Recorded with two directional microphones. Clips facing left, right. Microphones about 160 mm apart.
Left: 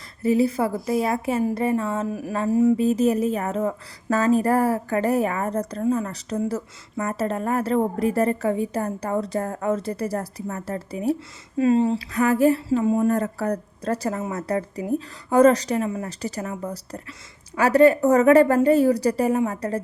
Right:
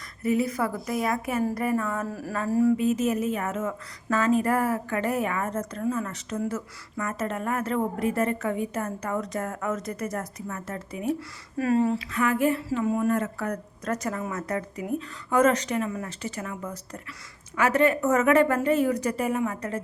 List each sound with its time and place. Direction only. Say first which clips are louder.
0.2 s a woman's voice: left 5 dB; 30° left (ahead or behind)
2.0 s a sound: left 5 dB; 15° left (ahead or behind)
2.4 s a woman's voice: left 3 dB; 20° left (ahead or behind)
2.7 s speech: left 4 dB; 35° left (ahead or behind)
11.5 s speech: left 4 dB; 25° left (ahead or behind)